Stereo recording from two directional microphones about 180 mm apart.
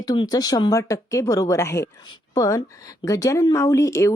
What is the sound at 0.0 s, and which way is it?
Speech, 20° left (ahead or behind).